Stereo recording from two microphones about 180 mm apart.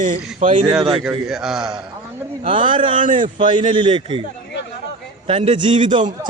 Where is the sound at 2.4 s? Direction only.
30° right (ahead or behind).